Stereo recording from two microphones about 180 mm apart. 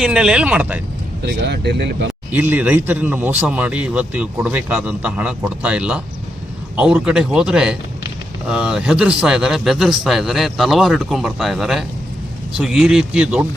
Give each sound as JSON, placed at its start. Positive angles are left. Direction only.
{"t": 0.0, "sound": "speech", "side_deg": -5}
{"t": 1.3, "sound": "speech", "side_deg": -65}
{"t": 2.3, "sound": "a man's voice", "side_deg": -10}